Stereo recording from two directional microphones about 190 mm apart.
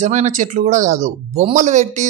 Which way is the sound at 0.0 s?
40° right (ahead or behind).